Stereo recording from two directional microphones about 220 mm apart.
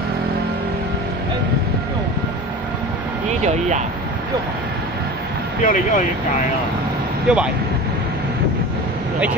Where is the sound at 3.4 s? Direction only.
35° right (ahead or behind).